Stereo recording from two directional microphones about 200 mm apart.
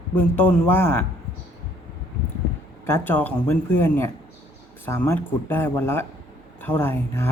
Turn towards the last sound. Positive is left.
turn(degrees=10)  # may be behind; listen again after turning